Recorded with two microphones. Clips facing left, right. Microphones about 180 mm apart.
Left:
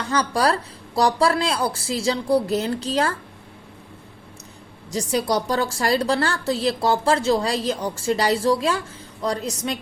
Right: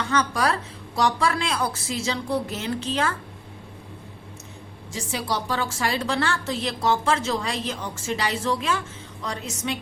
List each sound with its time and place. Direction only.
0.1 s a woman's voice: 35° left (ahead or behind)
4.9 s a woman's voice: 40° left (ahead or behind)